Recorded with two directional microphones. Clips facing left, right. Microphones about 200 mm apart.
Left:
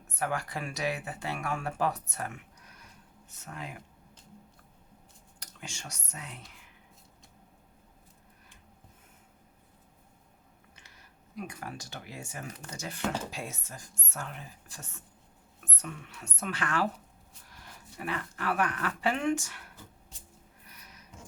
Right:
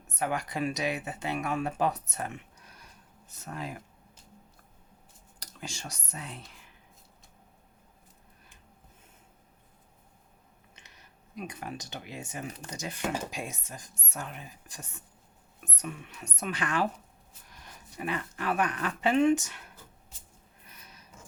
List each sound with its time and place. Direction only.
0.1 s speech: 20° right (ahead or behind)
3.2 s speech: 35° right (ahead or behind)
5.4 s speech: 35° right (ahead or behind)
10.8 s speech: 20° right (ahead or behind)
20.7 s a sound: 25° right (ahead or behind)